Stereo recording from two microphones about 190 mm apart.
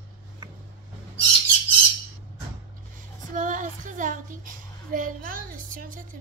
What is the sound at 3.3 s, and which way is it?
Child singing, 45° right (ahead or behind).